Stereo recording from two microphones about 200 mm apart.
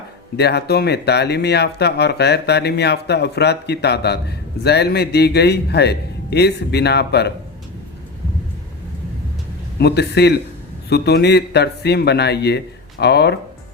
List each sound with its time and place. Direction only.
0.3 s speech: 55° left (ahead or behind)
9.7 s speech: 55° left (ahead or behind)